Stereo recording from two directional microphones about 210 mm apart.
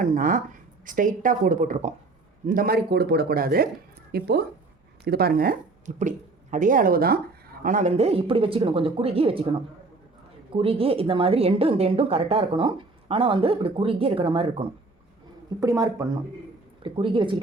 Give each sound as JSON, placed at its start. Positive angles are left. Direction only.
{"t": 0.0, "sound": "a woman's voice", "side_deg": -40}
{"t": 10.5, "sound": "a woman's voice", "side_deg": -25}